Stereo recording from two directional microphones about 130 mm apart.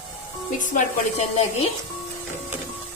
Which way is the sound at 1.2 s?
55° left (ahead or behind).